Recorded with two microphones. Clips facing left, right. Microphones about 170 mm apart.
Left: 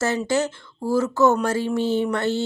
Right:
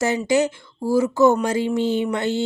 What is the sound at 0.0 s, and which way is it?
Speech, 15° right (ahead or behind).